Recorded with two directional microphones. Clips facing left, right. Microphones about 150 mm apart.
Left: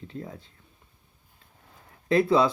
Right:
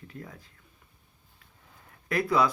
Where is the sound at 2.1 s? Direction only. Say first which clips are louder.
Left 4 dB; 25° left (ahead or behind).